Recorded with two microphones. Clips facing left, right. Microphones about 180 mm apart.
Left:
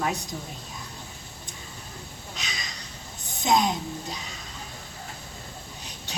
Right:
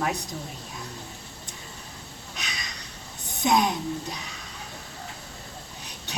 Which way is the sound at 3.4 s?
60° right (ahead or behind).